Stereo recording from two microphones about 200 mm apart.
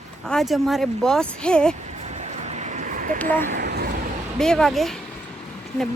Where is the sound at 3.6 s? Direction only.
55° right (ahead or behind).